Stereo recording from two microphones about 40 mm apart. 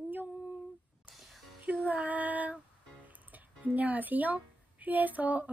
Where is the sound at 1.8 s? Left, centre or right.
Right.